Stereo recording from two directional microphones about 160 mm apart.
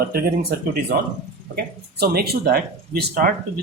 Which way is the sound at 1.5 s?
75° right (ahead or behind).